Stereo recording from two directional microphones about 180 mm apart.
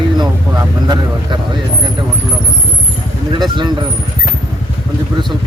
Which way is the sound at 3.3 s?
25° right (ahead or behind).